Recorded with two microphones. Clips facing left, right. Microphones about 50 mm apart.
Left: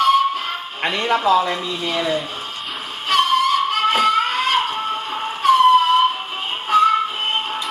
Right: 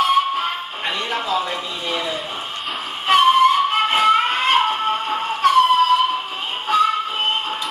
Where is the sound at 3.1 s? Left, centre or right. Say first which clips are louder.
Right 3 dB; right.